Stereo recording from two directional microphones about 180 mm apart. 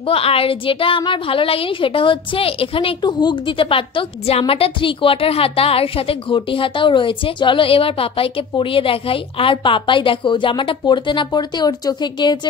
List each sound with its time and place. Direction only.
0.0 s a woman's voice: 30° left (ahead or behind)